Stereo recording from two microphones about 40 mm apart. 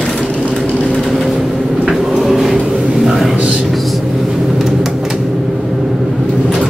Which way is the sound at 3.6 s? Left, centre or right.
Centre.